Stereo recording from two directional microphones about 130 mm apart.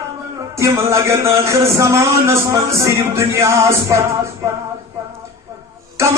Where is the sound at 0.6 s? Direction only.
20° right (ahead or behind).